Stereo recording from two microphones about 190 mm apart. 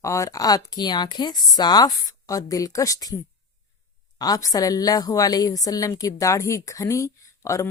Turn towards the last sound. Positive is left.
turn(degrees=15)  # may be behind; listen again after turning